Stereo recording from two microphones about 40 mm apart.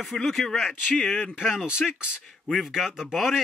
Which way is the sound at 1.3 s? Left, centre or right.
Centre.